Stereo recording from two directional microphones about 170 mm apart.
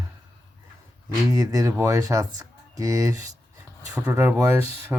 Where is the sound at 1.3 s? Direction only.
20° right (ahead or behind).